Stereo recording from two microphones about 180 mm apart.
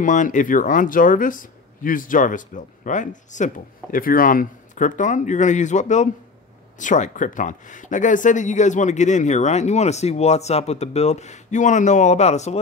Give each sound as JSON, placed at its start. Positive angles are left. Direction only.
{"t": 0.0, "sound": "speech", "side_deg": 45}